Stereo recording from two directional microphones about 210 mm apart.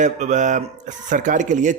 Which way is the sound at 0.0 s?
35° right (ahead or behind).